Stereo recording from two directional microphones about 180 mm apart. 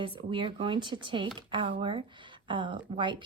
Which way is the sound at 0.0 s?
30° right (ahead or behind).